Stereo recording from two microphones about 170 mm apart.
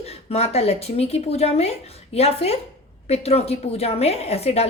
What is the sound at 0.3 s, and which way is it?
A woman's voice, 40° left (ahead or behind).